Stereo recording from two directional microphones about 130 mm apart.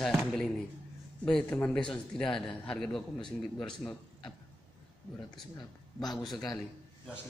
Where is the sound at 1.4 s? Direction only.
15° left (ahead or behind).